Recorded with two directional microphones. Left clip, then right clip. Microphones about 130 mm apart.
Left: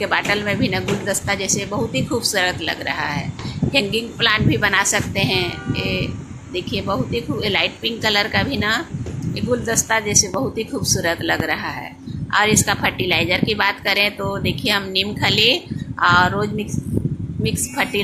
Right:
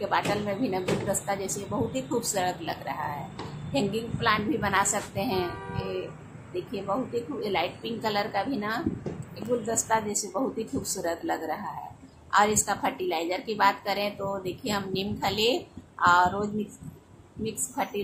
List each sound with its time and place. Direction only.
0.0 s a woman's voice: 5° left (ahead or behind)
7.3 s a woman's voice: 5° left (ahead or behind)